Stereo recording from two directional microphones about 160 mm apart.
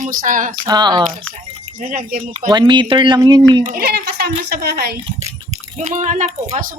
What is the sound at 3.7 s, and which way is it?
A child's voice, 80° right.